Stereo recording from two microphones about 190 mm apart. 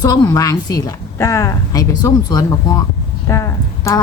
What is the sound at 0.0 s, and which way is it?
A woman's voice, 20° left (ahead or behind).